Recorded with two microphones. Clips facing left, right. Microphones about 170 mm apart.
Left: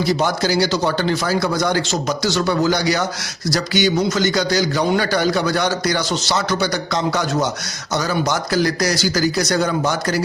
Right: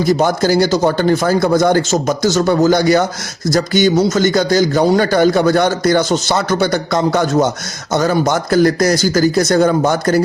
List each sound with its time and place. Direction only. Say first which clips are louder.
0.0 s a man's voice: right 5 dB; 50° right (ahead or behind)